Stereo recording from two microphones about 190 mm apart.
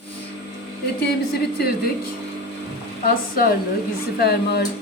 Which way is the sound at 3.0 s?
50° left (ahead or behind).